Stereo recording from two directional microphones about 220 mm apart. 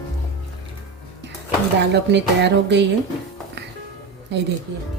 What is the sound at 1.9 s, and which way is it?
Speech, 50° right (ahead or behind).